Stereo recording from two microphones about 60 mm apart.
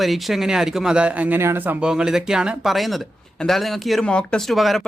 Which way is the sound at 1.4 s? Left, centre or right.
Right.